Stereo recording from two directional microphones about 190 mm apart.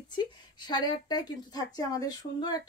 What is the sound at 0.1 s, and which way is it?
A woman's voice, 25° left (ahead or behind).